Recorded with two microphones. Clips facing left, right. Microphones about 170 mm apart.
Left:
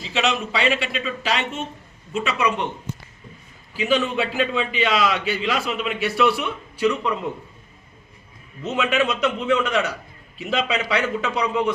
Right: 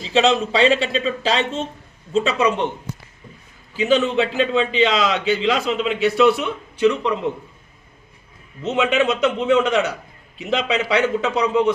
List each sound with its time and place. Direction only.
0.1 s a man's voice: 30° right (ahead or behind)
3.8 s a man's voice: 25° right (ahead or behind)
8.6 s a man's voice: 20° right (ahead or behind)